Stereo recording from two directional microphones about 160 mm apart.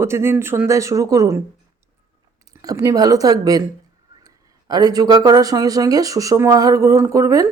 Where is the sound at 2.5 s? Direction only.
20° right (ahead or behind).